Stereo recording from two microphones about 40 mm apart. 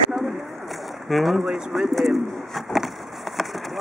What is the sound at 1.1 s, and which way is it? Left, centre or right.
Speech, centre.